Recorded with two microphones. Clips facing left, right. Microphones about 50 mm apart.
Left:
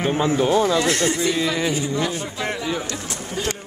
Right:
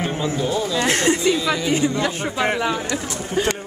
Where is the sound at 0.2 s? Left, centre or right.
Left.